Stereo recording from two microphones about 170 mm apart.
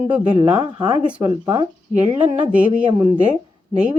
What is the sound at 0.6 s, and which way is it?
Speech, 25° right (ahead or behind).